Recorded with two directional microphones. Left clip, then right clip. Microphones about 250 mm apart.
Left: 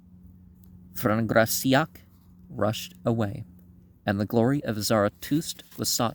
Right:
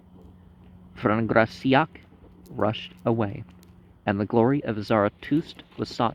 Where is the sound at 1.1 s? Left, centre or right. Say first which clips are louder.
Right 1 dB; left.